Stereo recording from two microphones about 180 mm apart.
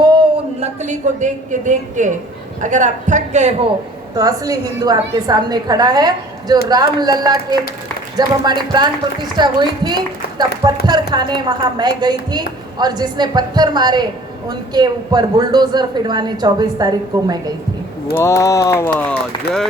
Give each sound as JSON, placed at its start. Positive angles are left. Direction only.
{"t": 0.6, "sound": "a woman's voice", "side_deg": -40}
{"t": 4.1, "sound": "a woman's voice", "side_deg": -20}
{"t": 18.1, "sound": "speech", "side_deg": 15}